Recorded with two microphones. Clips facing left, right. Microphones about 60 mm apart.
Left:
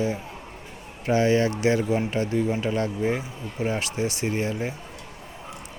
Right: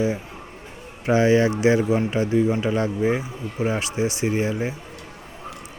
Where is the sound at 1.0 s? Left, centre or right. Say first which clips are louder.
Right 3 dB; centre.